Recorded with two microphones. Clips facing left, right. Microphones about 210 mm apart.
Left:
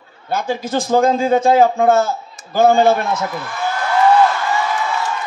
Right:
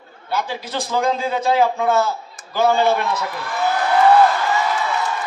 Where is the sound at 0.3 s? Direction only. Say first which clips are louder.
Left 5 dB; 50° left (ahead or behind).